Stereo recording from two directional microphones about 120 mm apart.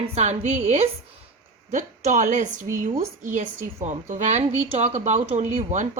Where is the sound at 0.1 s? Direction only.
70° right (ahead or behind).